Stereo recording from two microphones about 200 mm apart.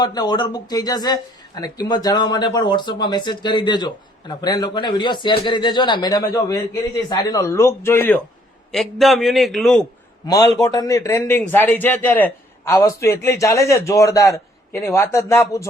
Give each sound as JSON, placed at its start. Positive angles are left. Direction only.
{"t": 0.0, "sound": "a man's voice", "side_deg": 20}
{"t": 10.2, "sound": "a man's voice", "side_deg": 20}